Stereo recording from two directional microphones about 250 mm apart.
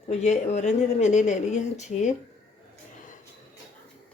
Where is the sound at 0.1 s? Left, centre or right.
Left.